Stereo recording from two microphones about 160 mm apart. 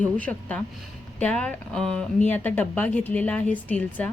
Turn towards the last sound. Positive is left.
turn(degrees=10)  # may be behind; listen again after turning